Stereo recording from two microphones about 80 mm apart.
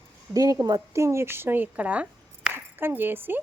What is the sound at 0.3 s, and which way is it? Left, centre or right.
Speech, right.